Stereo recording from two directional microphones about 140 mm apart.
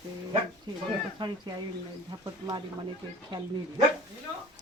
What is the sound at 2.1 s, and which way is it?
Speech, 30° right (ahead or behind).